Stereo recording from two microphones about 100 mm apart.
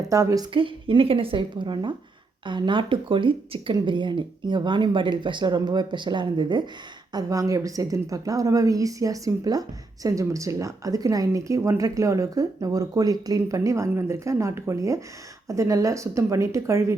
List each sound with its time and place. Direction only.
0.1 s a woman's voice: 30° right (ahead or behind)
0.5 s a woman's voice: 60° right (ahead or behind)
7.1 s a woman's voice: 40° right (ahead or behind)